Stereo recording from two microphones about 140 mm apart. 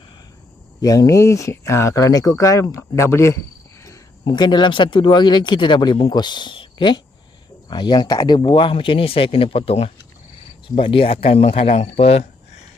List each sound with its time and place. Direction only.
0.8 s speech: 25° left (ahead or behind); by 12.6 s 50° left (ahead or behind)